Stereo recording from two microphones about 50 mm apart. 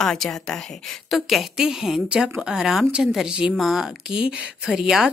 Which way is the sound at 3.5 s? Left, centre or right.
Centre.